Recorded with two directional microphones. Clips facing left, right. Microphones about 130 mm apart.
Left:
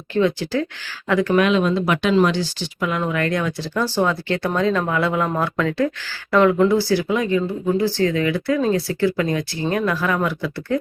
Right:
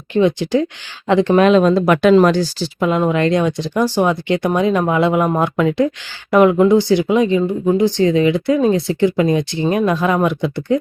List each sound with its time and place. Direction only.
0.1 s speech: 20° right (ahead or behind)
1.5 s speech: 40° right (ahead or behind)
2.8 s speech: 25° right (ahead or behind)